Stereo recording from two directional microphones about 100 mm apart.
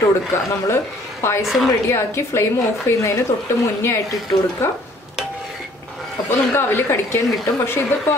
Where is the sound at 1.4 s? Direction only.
Centre (ahead or behind).